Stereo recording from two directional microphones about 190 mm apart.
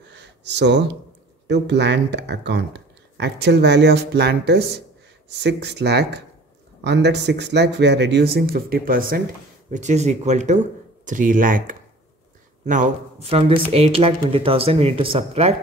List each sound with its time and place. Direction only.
0.1 s a sound: 65° right (ahead or behind)
1.5 s speech: 65° right (ahead or behind); by 9.2 s 50° right (ahead or behind)
9.7 s speech: 40° right (ahead or behind)